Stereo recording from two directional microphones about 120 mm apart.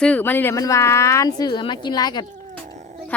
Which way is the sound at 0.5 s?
25° left (ahead or behind).